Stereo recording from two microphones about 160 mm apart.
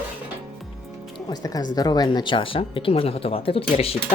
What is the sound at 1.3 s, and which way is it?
Speech, 25° left (ahead or behind).